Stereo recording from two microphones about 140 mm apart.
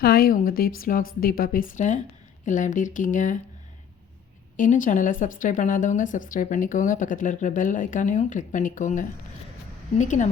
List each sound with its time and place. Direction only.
0.0 s a woman's voice: 90° left; by 3.3 s 65° left (ahead or behind)
4.5 s a woman's voice: 65° left (ahead or behind)